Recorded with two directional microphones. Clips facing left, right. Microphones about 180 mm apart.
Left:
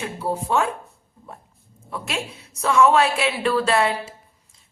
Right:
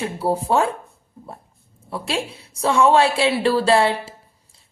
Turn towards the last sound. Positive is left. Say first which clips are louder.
# right 4 dB
turn(degrees=-30)  # may be behind; listen again after turning